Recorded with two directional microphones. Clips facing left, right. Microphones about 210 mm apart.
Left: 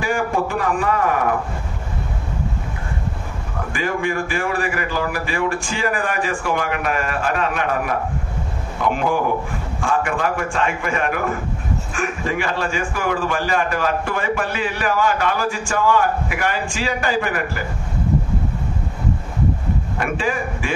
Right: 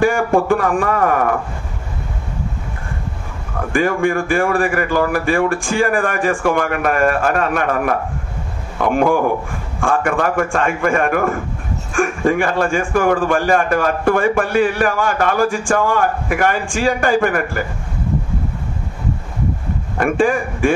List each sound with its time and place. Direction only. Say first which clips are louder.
0.0 s a man's voice: right 6 dB; 50° right (ahead or behind)
3.7 s a man's voice: right 6 dB; 50° right (ahead or behind)
20.0 s a man's voice: right 9 dB; 50° right (ahead or behind)